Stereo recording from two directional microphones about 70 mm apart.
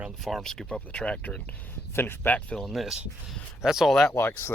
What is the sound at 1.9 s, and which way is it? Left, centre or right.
Speech, left.